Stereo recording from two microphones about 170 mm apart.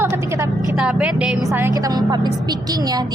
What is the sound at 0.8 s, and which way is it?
A woman's voice, 5° right (ahead or behind).